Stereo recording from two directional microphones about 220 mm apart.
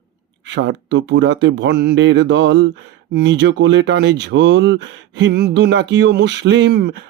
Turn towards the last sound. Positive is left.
turn(degrees=-45)  # may be behind; listen again after turning